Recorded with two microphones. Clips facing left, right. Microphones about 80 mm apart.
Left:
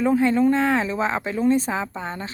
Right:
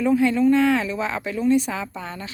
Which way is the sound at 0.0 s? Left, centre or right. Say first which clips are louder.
Even; left.